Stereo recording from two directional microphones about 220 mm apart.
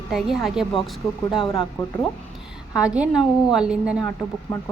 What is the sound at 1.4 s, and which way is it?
Speech, 25° left (ahead or behind).